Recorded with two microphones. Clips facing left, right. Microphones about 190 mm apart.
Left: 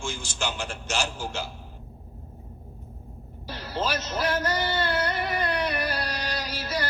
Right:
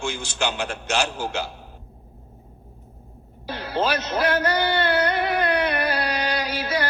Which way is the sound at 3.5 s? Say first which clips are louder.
Right 5 dB; 60° right (ahead or behind).